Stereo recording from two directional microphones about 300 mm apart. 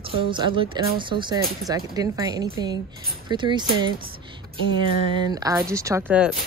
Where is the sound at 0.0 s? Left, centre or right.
Centre.